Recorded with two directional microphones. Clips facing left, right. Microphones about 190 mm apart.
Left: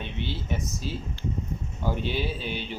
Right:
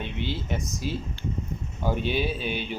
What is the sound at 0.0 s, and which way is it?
Speech, 15° right (ahead or behind).